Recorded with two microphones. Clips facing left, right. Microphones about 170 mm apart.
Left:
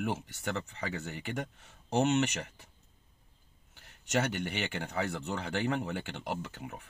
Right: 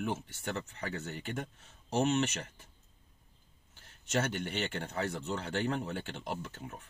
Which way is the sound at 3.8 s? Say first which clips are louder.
Left 2 dB; 65° left (ahead or behind).